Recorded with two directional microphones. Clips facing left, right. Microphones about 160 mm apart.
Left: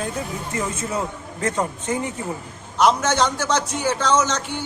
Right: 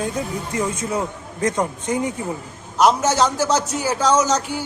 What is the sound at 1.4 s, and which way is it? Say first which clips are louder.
Speech: right 2 dB; 15° right (ahead or behind).